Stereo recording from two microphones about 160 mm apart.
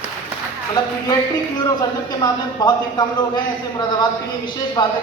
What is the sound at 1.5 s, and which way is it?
Speech, 25° left (ahead or behind).